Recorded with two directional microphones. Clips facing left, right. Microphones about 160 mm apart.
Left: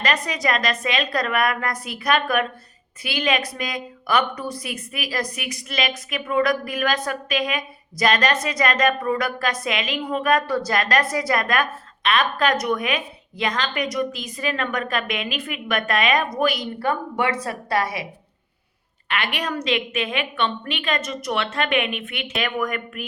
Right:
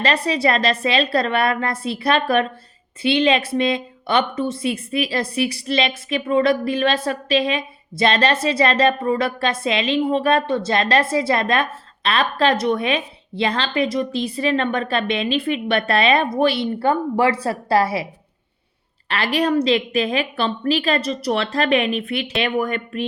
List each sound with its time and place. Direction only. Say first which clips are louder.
0.0 s a woman's voice: right 5 dB; 30° right (ahead or behind)